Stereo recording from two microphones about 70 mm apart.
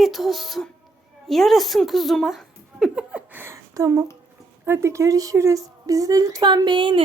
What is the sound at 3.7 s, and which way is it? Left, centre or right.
A woman's voice, right.